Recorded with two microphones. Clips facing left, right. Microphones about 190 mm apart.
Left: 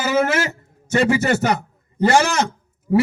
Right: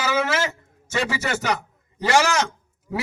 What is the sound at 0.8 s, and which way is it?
Speech, 55° left (ahead or behind).